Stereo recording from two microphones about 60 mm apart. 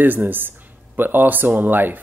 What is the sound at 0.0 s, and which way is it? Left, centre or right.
Speech, right.